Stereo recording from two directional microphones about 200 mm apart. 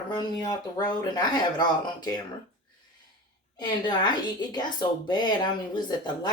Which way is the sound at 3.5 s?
20° left (ahead or behind).